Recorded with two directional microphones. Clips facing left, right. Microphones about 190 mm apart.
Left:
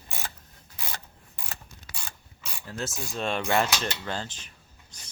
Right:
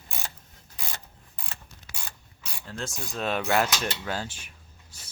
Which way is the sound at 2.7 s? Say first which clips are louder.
Left 1 dB; centre (ahead or behind).